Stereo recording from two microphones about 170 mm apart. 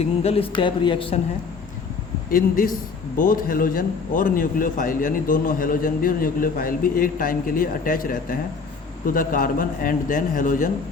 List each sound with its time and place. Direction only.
0.0 s speech: 40° left (ahead or behind)
3.2 s a man's voice: 55° left (ahead or behind)